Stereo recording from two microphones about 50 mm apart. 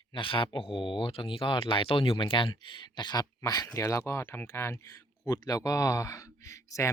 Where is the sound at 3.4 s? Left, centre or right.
Left.